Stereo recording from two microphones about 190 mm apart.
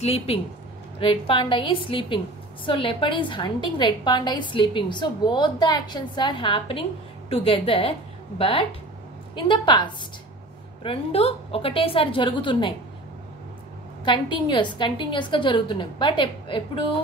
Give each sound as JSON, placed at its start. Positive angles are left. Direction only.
{"t": 0.0, "sound": "a woman's voice", "side_deg": 35}
{"t": 14.0, "sound": "a woman's voice", "side_deg": 25}